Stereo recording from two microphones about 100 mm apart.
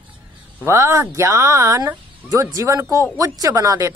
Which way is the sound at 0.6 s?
30° right (ahead or behind).